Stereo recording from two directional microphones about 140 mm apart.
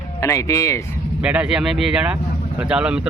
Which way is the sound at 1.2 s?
10° right (ahead or behind).